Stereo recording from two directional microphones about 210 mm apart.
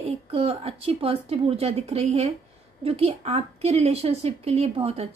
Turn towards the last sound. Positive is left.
turn(degrees=-30)  # may be behind; listen again after turning